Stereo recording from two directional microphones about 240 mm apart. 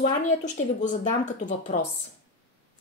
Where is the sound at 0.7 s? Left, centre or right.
Left.